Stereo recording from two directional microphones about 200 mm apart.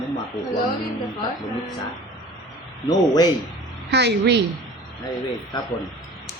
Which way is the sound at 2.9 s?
20° left (ahead or behind).